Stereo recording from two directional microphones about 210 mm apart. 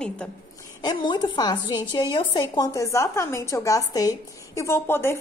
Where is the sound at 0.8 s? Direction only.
20° left (ahead or behind).